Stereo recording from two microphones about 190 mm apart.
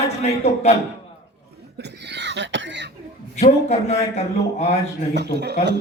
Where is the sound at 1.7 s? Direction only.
60° right (ahead or behind).